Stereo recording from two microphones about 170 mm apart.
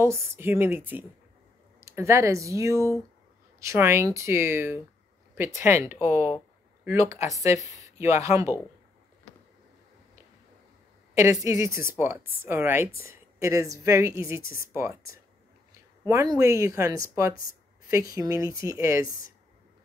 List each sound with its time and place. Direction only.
0.0 s a woman's voice: 15° right (ahead or behind)
11.1 s a woman's voice: 20° right (ahead or behind)